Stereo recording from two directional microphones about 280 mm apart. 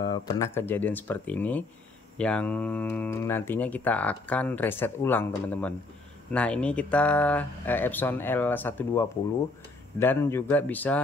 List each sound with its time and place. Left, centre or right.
0.0 s speech: centre